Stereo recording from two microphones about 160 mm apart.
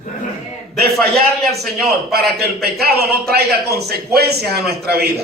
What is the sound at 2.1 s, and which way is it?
A man's voice, 75° right (ahead or behind).